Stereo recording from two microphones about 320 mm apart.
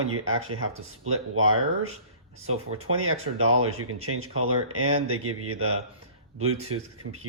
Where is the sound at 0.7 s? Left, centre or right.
Right.